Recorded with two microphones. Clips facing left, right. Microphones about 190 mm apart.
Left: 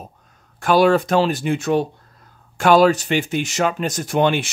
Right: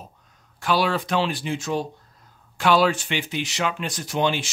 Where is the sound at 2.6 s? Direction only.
45° left (ahead or behind).